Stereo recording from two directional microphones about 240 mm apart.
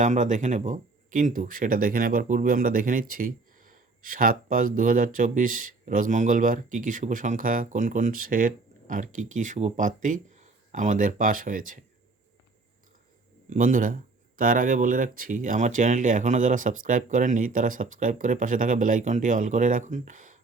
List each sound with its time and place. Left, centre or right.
0.0 s speech: right
13.5 s speech: right